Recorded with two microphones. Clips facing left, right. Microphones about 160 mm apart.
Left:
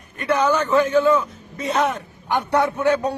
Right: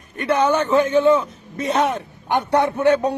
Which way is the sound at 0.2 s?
25° right (ahead or behind).